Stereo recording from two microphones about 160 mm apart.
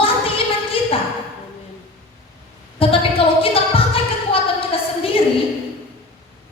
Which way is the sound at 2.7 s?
35° left (ahead or behind).